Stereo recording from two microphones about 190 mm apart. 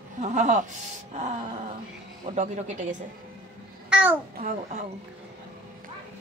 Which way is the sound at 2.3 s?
40° right (ahead or behind).